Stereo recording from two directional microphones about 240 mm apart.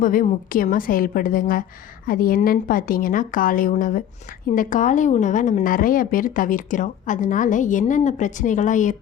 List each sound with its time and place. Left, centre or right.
0.0 s speech: left